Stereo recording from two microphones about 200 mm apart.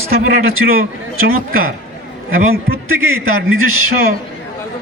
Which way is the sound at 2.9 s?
90° right.